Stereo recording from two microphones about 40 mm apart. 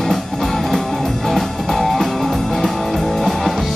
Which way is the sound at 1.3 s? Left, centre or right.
Centre.